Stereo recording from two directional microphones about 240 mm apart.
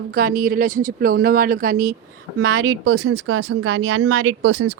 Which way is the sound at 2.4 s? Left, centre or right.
Right.